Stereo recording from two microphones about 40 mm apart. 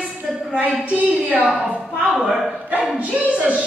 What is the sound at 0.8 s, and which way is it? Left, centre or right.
Speech, right.